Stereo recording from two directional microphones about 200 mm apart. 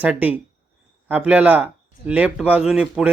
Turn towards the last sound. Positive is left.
turn(degrees=-5)  # may be behind; listen again after turning